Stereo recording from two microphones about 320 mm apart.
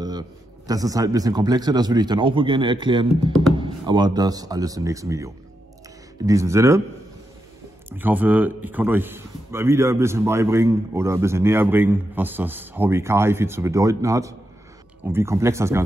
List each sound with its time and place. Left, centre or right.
0.7 s a man's voice: centre
8.0 s a man's voice: centre